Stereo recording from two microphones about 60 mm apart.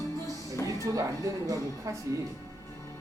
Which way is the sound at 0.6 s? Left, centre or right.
Right.